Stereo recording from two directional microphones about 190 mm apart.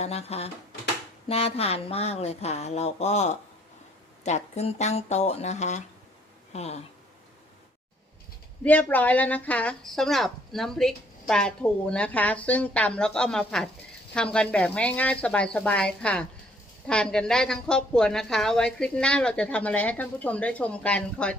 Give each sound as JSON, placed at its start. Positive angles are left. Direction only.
{"t": 0.0, "sound": "speech", "side_deg": 35}
{"t": 8.6, "sound": "a woman's voice", "side_deg": 10}